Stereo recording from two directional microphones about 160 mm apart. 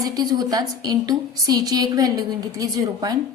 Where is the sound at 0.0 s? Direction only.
25° right (ahead or behind).